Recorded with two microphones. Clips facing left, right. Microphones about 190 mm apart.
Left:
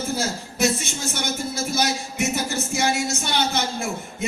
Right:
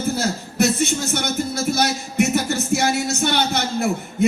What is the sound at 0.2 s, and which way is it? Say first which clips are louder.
Speech: right 3 dB; 60° right (ahead or behind).